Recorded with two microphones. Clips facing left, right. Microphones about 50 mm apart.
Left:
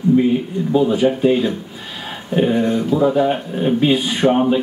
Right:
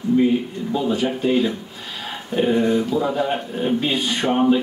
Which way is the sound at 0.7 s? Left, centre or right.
Centre.